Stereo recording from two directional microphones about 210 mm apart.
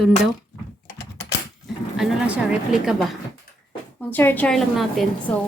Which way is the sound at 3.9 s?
10° left (ahead or behind).